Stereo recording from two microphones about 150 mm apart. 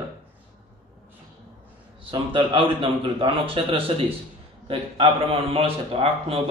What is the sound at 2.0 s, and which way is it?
A man's voice, 35° right (ahead or behind).